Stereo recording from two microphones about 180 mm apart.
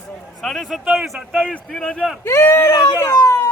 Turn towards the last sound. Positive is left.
turn(degrees=15)  # may be behind; listen again after turning